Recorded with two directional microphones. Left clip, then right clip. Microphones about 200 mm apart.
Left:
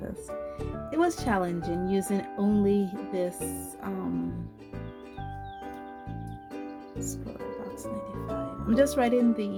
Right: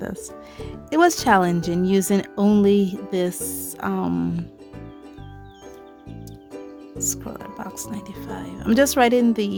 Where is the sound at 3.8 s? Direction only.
55° right (ahead or behind).